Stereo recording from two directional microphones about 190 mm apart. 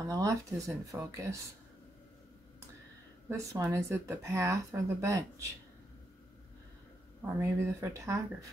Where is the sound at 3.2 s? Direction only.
15° right (ahead or behind).